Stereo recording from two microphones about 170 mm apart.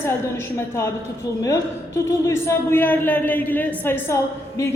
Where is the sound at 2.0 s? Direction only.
15° left (ahead or behind).